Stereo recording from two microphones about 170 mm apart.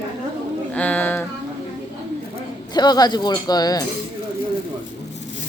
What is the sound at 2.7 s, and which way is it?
Speech, 25° left (ahead or behind).